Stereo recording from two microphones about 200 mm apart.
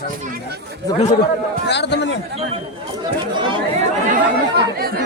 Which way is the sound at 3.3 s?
25° right (ahead or behind).